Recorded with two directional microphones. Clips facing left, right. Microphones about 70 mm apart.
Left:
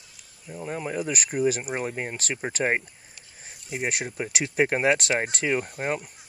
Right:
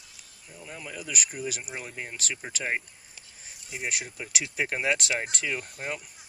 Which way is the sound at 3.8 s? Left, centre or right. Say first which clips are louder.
Left 6 dB; left.